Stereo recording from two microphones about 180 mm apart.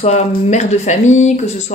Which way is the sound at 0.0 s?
40° left (ahead or behind).